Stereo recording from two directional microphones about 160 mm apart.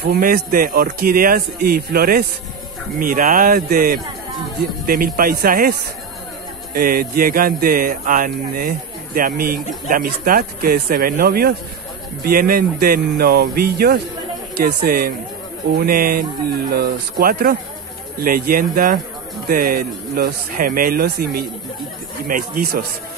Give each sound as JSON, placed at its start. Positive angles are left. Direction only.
{"t": 0.0, "sound": "speech", "side_deg": -75}
{"t": 22.3, "sound": "speech", "side_deg": -70}